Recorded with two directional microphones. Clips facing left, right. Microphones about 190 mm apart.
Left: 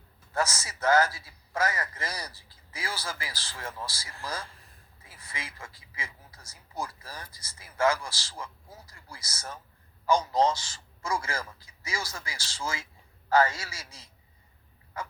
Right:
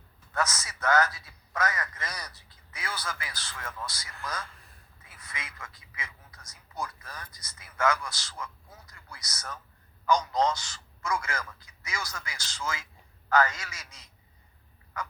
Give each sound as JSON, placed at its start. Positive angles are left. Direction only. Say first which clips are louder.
{"t": 0.3, "sound": "speech", "louder": "left 1 dB", "side_deg": 30}